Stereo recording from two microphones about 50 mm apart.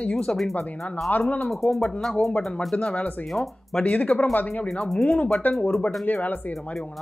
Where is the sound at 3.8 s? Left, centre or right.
Left.